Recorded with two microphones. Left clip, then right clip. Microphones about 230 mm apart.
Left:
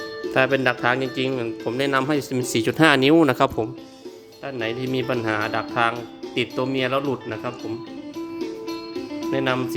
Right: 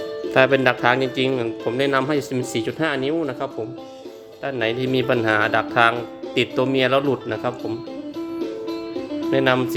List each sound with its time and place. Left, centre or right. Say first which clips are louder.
0.3 s speech: right 3 dB; centre; by 3.5 s left
4.4 s speech: right 4 dB; centre
9.3 s speech: right 5 dB; centre